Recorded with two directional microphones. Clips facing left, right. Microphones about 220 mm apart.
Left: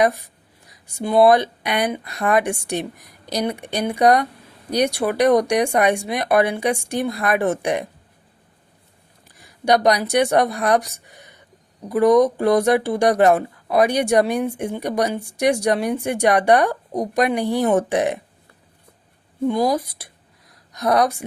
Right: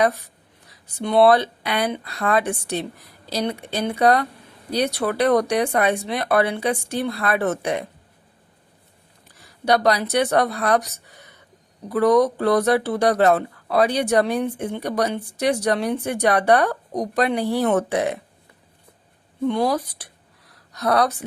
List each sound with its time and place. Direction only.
0.0 s speech: 15° left (ahead or behind)
9.4 s speech: 15° left (ahead or behind)
19.5 s speech: 10° left (ahead or behind)